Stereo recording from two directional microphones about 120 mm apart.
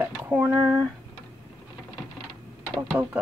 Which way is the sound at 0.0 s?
15° right (ahead or behind).